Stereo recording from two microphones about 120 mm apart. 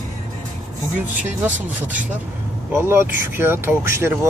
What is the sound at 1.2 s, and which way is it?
Speech, 15° right (ahead or behind).